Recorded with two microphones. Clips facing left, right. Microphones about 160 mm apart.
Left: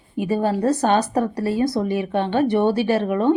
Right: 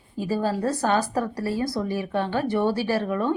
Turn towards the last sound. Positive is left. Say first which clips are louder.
# left 6 dB
turn(degrees=20)  # may be behind; listen again after turning